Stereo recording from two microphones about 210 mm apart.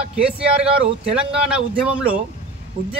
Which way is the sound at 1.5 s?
5° right (ahead or behind).